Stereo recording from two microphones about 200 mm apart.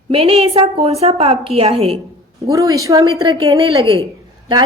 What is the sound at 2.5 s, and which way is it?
A woman's voice, 15° right (ahead or behind).